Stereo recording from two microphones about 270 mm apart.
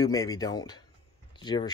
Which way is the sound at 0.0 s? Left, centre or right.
Centre.